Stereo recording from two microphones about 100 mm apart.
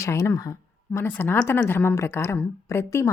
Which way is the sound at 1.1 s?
20° left (ahead or behind).